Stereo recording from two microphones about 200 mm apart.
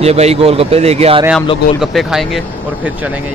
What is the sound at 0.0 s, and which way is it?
Speech, 30° right (ahead or behind).